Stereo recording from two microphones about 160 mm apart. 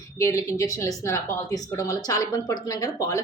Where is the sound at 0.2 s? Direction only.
20° left (ahead or behind).